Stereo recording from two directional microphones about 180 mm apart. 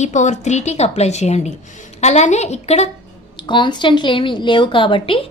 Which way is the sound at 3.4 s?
25° left (ahead or behind).